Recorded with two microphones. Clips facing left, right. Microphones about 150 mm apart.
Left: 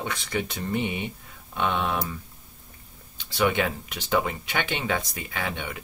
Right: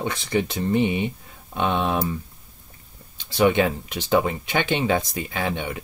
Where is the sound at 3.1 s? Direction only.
30° right (ahead or behind).